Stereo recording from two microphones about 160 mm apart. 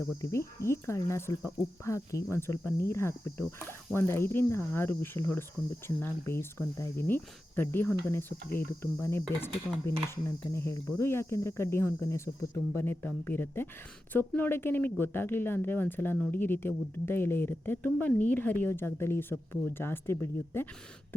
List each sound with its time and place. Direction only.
0.2 s speech: 15° left (ahead or behind)
1.5 s cricket: 20° left (ahead or behind)
2.3 s speech: 15° left (ahead or behind)